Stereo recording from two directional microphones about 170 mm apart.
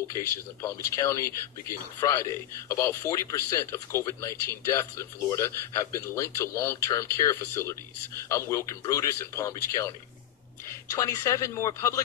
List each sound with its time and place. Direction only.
0.1 s speech: 15° left (ahead or behind)
11.0 s speech: 20° left (ahead or behind)